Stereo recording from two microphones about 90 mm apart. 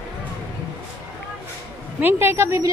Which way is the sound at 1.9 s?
25° right (ahead or behind).